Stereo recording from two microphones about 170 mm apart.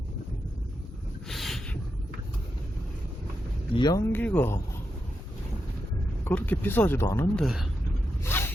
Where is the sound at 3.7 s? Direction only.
25° left (ahead or behind).